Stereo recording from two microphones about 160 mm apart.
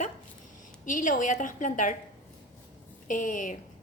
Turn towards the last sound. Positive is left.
turn(degrees=55)  # may be behind; listen again after turning